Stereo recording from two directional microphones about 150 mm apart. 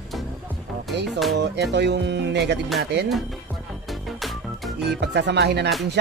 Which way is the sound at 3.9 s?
Centre (ahead or behind).